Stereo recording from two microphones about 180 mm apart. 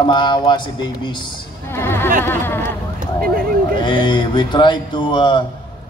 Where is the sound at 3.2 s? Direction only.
55° right (ahead or behind).